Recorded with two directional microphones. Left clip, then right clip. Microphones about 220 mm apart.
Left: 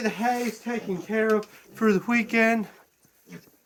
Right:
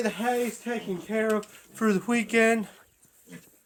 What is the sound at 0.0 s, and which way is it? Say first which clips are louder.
Speech: left 1 dB; 15° right (ahead or behind).